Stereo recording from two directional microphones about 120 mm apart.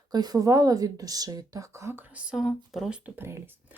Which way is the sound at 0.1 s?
35° right (ahead or behind).